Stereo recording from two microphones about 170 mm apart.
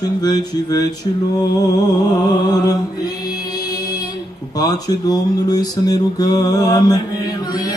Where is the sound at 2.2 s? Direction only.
20° left (ahead or behind).